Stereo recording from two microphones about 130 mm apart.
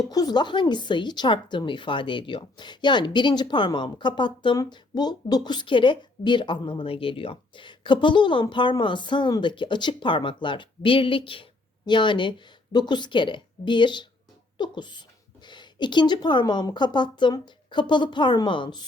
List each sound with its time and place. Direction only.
0.1 s speech: 30° left (ahead or behind)